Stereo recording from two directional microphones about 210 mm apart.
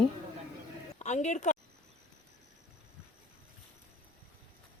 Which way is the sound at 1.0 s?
35° left (ahead or behind).